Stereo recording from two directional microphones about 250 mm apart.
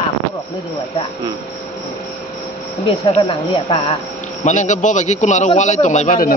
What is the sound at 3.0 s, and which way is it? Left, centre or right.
A man's voice, left.